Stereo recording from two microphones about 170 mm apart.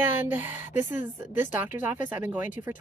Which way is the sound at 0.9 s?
50° left (ahead or behind).